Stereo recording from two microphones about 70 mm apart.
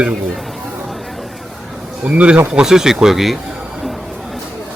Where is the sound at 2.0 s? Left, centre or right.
Centre.